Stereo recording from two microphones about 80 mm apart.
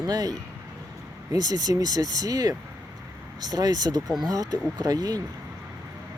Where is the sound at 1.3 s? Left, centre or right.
Right.